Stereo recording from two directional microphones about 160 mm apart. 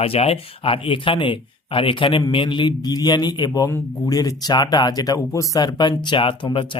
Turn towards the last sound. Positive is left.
turn(degrees=30)  # may be behind; listen again after turning